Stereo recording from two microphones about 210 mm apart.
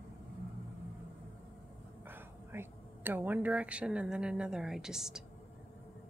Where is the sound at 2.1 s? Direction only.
10° right (ahead or behind).